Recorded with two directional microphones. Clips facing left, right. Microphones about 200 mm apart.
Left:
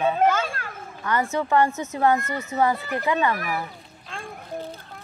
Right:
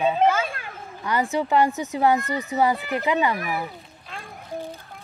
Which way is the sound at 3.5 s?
10° right (ahead or behind).